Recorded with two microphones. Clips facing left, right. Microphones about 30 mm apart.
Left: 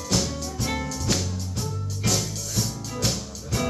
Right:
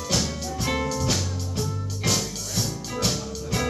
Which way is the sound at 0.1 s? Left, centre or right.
Centre.